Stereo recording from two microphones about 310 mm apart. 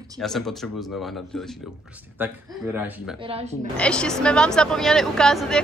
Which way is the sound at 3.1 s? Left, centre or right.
Centre.